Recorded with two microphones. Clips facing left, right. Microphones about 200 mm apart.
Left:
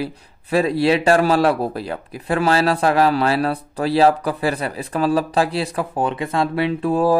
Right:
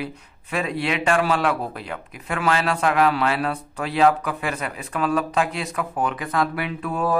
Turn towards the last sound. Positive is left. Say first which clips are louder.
# left 7 dB
turn(degrees=30)  # may be behind; listen again after turning